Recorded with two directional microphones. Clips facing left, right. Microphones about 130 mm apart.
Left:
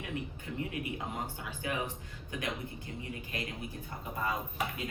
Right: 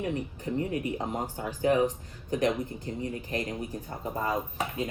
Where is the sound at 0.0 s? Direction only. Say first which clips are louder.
Right 8 dB; 35° right (ahead or behind).